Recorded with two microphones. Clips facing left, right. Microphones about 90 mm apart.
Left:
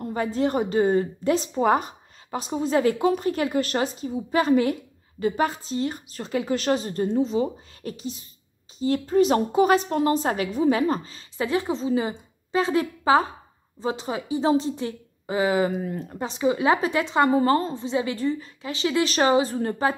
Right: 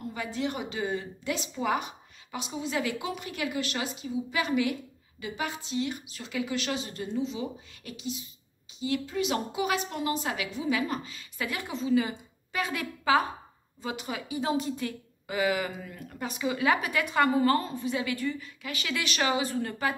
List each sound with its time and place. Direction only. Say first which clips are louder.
0.0 s a woman's voice: left 8 dB; 40° left (ahead or behind)